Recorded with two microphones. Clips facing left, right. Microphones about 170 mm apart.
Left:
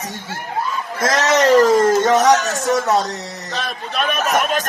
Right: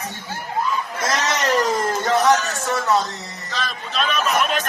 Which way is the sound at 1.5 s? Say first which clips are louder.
Left 9 dB; 90° left.